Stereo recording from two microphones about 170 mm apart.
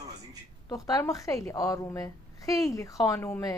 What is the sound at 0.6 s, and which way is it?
A woman's voice, 20° left (ahead or behind).